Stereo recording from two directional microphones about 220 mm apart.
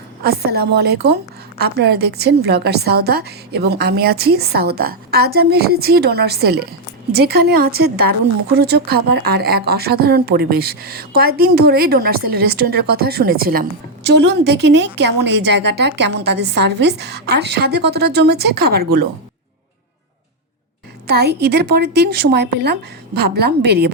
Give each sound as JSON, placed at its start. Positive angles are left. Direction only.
{"t": 0.2, "sound": "speech", "side_deg": -45}
{"t": 21.1, "sound": "speech", "side_deg": -45}